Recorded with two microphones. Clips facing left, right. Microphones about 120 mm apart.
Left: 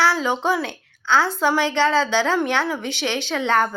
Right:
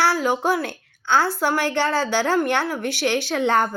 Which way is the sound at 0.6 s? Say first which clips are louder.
Even; 90° left.